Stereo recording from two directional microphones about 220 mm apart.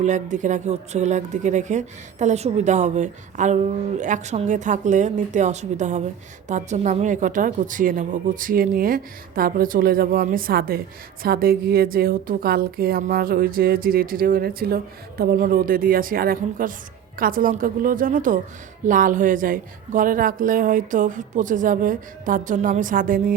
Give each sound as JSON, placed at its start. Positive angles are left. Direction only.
{"t": 0.0, "sound": "a woman's voice", "side_deg": -35}